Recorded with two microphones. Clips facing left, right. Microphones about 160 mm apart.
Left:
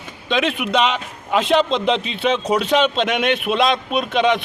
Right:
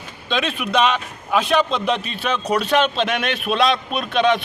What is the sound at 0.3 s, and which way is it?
Speech, 20° left (ahead or behind).